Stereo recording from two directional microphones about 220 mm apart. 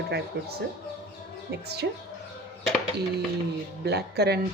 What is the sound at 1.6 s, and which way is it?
Speech, 50° right (ahead or behind).